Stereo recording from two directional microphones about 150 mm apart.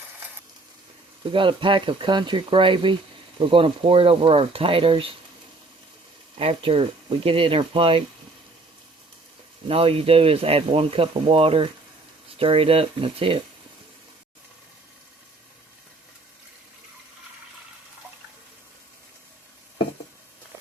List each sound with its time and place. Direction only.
1.2 s speech: 35° right (ahead or behind)
6.4 s speech: 40° right (ahead or behind)
9.6 s speech: 40° right (ahead or behind)